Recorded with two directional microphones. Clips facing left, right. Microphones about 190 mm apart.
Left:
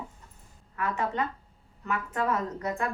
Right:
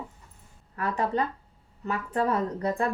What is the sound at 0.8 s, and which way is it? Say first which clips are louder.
A woman's voice: right 3 dB; 35° right (ahead or behind).